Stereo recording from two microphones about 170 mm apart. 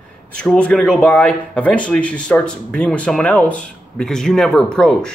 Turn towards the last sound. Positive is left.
turn(degrees=5)  # may be behind; listen again after turning